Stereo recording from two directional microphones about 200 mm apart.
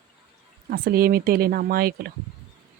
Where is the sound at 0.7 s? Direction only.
50° right (ahead or behind).